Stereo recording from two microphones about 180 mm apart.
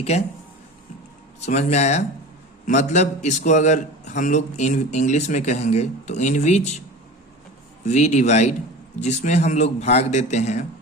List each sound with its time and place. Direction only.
1.4 s a man's voice: 40° left (ahead or behind)
7.9 s a man's voice: 40° left (ahead or behind)